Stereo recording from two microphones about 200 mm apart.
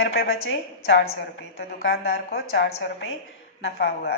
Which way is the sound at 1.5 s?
55° left (ahead or behind).